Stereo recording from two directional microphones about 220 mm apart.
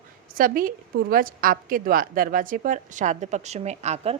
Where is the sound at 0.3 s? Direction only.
40° right (ahead or behind).